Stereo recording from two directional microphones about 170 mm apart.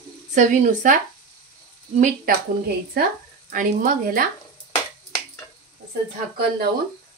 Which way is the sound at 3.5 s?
55° right (ahead or behind).